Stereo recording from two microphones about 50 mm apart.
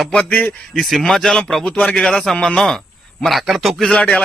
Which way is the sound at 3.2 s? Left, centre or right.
Centre.